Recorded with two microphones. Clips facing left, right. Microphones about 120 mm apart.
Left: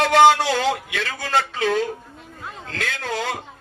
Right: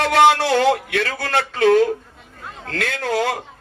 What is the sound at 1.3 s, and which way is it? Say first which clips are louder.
Speech: right 5 dB; 60° right (ahead or behind).